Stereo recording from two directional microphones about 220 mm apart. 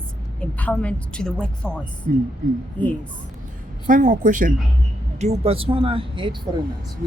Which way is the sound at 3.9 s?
35° right (ahead or behind).